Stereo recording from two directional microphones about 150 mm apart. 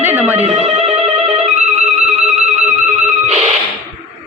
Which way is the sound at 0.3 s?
45° right (ahead or behind).